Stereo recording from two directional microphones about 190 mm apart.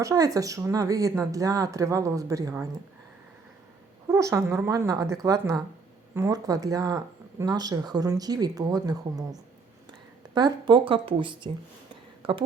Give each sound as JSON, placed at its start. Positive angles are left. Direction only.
{"t": 0.0, "sound": "speech", "side_deg": -15}
{"t": 4.1, "sound": "speech", "side_deg": -15}